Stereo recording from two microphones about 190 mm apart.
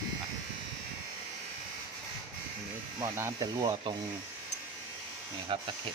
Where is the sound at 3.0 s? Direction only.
20° right (ahead or behind).